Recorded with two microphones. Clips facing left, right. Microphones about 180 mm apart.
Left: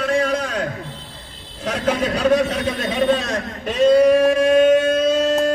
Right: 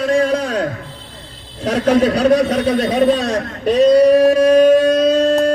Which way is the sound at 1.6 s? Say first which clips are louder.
Right 7 dB; 35° right (ahead or behind).